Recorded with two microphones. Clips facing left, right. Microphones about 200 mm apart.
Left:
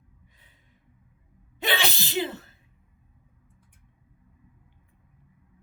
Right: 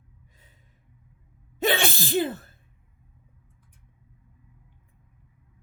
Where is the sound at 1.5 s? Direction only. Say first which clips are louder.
Right 4 dB; 45° right (ahead or behind).